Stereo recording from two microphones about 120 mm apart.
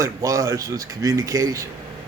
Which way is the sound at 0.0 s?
25° right (ahead or behind).